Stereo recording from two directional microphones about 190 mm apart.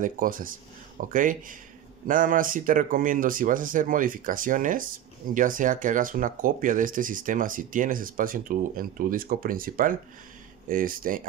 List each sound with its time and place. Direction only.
0.0 s speech: 45° right (ahead or behind)